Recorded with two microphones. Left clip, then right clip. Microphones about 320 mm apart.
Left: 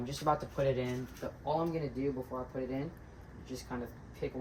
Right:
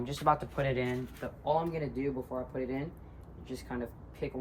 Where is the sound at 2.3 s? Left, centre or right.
Right.